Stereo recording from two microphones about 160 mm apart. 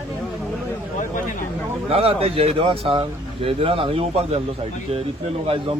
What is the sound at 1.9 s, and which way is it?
Speech, 35° right (ahead or behind).